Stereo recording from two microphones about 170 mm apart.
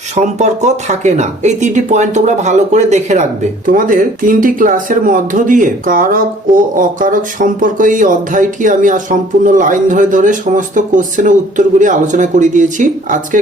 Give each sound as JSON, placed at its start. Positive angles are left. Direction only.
{"t": 0.3, "sound": "speech", "side_deg": -45}